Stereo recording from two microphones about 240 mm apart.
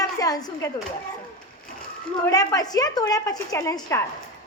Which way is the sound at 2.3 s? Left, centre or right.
Centre.